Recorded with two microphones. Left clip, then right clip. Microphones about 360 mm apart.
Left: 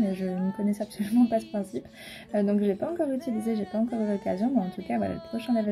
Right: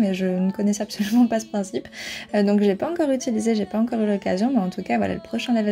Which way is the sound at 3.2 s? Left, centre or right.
Right.